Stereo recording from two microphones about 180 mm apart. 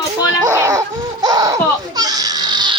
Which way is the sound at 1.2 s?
20° right (ahead or behind).